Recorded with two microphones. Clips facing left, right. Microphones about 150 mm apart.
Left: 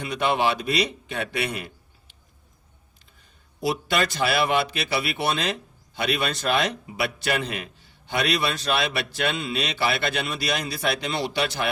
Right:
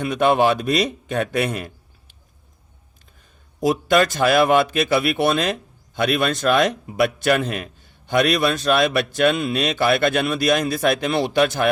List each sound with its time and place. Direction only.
0.0 s a man's voice: 50° right (ahead or behind)
3.6 s a man's voice: 45° right (ahead or behind)